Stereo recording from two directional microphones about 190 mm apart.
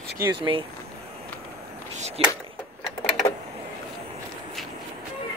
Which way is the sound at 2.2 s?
30° right (ahead or behind).